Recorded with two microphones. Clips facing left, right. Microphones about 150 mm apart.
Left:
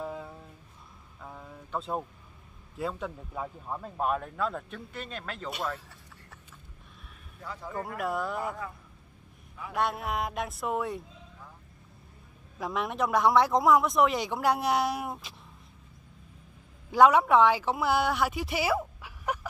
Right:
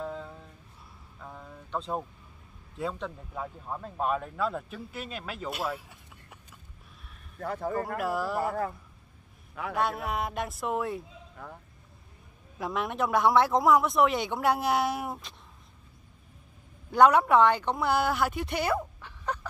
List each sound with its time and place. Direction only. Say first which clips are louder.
0.0 s a sound: right 1 dB; 10° left (ahead or behind)
2.8 s speech: even; centre (ahead or behind)
7.3 s a man's voice: right 8 dB; 55° right (ahead or behind)
8.0 s speech: even; centre (ahead or behind)
9.8 s speech: even; centre (ahead or behind)
11.4 s vehicle: right 9 dB; 65° right (ahead or behind)
12.5 s speech: even; centre (ahead or behind)
16.9 s a woman's voice: even; centre (ahead or behind)